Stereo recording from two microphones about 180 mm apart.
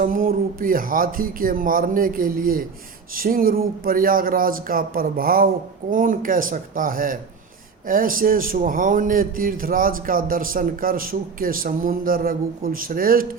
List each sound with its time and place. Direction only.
0.0 s a man's voice: 50° right (ahead or behind)